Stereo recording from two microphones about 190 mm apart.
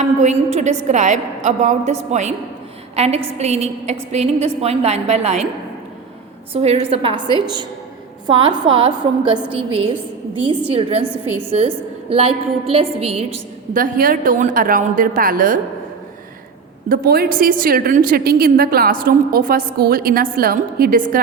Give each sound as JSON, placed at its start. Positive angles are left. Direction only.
{"t": 0.0, "sound": "a woman's voice", "side_deg": -35}
{"t": 6.5, "sound": "a woman's voice", "side_deg": -35}
{"t": 11.1, "sound": "a woman's voice", "side_deg": -10}
{"t": 12.0, "sound": "a woman's voice", "side_deg": -30}
{"t": 13.7, "sound": "a woman's voice", "side_deg": -45}
{"t": 16.9, "sound": "a woman's voice", "side_deg": -55}